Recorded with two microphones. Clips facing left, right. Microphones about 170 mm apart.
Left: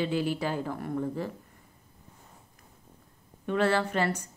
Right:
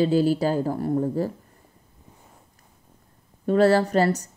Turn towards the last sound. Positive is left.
turn(degrees=-35)  # may be behind; listen again after turning